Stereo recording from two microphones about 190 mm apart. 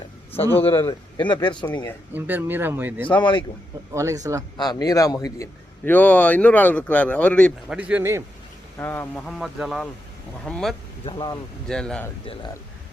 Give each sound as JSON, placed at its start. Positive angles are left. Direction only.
{"t": 0.3, "sound": "speech", "side_deg": 10}
{"t": 0.8, "sound": "speech", "side_deg": 25}
{"t": 2.1, "sound": "speech", "side_deg": -10}
{"t": 3.0, "sound": "speech", "side_deg": 25}
{"t": 3.9, "sound": "speech", "side_deg": -15}
{"t": 4.5, "sound": "a man's voice", "side_deg": 20}
{"t": 7.7, "sound": "speech", "side_deg": -5}
{"t": 8.8, "sound": "speech", "side_deg": 10}
{"t": 11.0, "sound": "speech", "side_deg": 25}
{"t": 11.7, "sound": "speech", "side_deg": 5}
{"t": 12.2, "sound": "speech", "side_deg": 30}